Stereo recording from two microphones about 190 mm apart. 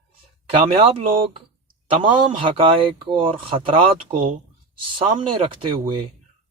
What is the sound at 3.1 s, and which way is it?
Speech, 25° right (ahead or behind).